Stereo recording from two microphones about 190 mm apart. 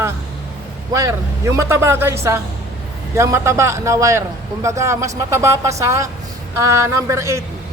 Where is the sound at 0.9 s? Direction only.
15° right (ahead or behind).